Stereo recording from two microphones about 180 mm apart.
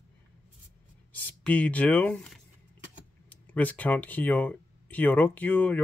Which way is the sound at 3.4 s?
10° left (ahead or behind).